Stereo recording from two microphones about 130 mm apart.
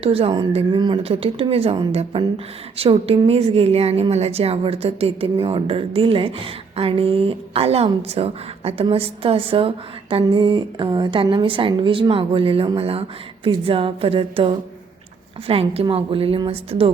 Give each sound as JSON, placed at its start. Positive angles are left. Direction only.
{"t": 0.0, "sound": "speech", "side_deg": -50}